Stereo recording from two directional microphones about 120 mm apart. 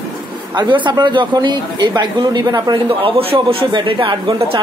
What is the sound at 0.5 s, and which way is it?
Speech, 40° right (ahead or behind).